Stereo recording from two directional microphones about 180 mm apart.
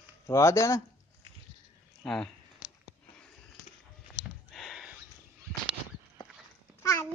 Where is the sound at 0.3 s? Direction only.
15° left (ahead or behind).